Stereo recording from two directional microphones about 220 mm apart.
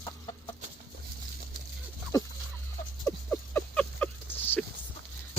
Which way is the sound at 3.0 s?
10° left (ahead or behind).